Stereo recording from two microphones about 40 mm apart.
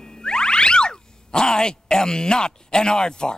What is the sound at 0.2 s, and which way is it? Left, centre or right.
Music, centre.